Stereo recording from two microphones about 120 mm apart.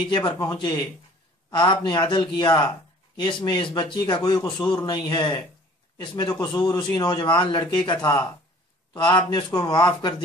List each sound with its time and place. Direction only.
0.1 s a man's voice: 35° left (ahead or behind)
8.9 s a man's voice: 40° left (ahead or behind)